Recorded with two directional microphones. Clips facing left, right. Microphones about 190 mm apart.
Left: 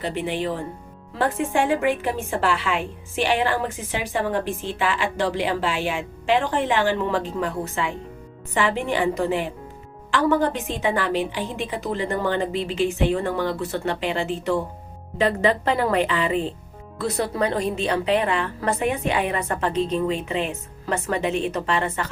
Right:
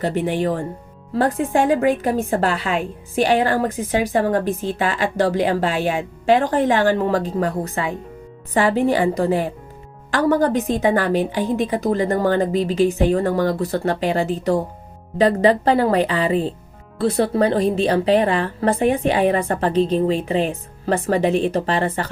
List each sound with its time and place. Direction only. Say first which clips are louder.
0.0 s a woman's voice: right 5 dB; 45° right (ahead or behind)